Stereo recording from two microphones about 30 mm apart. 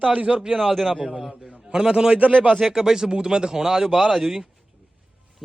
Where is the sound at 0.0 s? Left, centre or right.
Right.